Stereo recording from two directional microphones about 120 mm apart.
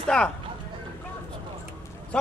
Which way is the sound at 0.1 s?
5° left (ahead or behind).